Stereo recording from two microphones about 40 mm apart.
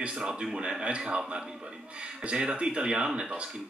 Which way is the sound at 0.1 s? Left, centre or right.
Centre.